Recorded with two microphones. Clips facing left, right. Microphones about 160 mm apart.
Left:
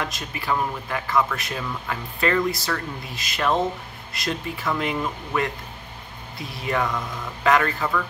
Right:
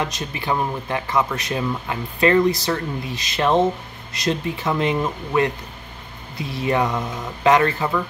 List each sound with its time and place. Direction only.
0.0 s speech: 20° right (ahead or behind)